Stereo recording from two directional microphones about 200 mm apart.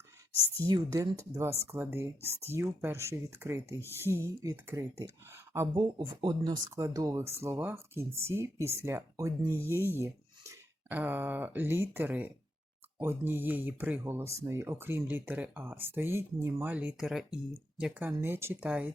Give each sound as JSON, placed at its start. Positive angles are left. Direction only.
{"t": 0.7, "sound": "speech", "side_deg": -15}
{"t": 9.7, "sound": "speech", "side_deg": 10}
{"t": 10.0, "sound": "speech", "side_deg": -15}